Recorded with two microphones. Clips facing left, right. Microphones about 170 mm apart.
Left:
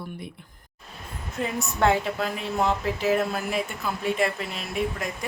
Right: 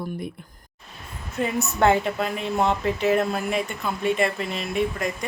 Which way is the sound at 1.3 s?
Centre (ahead or behind).